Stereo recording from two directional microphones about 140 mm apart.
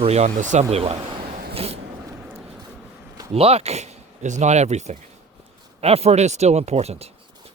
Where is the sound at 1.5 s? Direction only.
45° right (ahead or behind).